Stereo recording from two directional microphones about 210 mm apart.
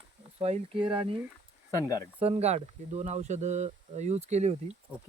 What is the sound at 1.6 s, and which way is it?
Speech, 15° left (ahead or behind).